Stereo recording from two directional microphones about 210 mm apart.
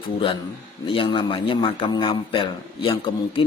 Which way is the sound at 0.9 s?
25° left (ahead or behind).